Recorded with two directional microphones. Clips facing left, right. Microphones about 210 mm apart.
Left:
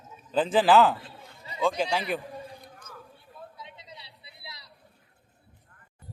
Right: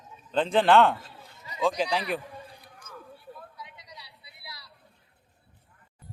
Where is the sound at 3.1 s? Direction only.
25° left (ahead or behind).